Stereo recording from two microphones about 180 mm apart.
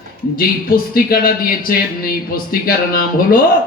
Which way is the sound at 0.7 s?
55° left (ahead or behind).